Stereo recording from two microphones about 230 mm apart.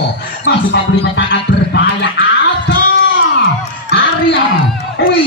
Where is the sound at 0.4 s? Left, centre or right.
Left.